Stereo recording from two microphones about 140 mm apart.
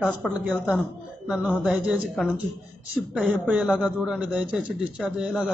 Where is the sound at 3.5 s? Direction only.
5° right (ahead or behind).